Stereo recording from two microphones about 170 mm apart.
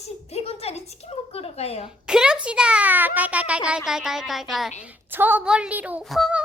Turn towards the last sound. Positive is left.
turn(degrees=0)  # may be behind; listen again after turning